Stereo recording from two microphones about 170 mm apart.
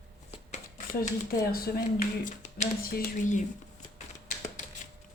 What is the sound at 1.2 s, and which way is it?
Speech, 60° left (ahead or behind).